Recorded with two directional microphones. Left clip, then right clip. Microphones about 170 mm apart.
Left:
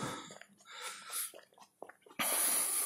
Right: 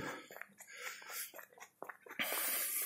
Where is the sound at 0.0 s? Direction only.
25° left (ahead or behind).